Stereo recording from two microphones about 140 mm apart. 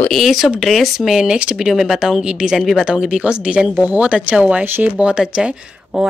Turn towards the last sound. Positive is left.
turn(degrees=-5)  # may be behind; listen again after turning